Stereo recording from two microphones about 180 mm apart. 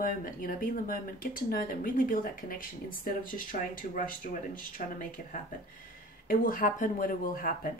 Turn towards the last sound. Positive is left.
turn(degrees=50)  # may be behind; listen again after turning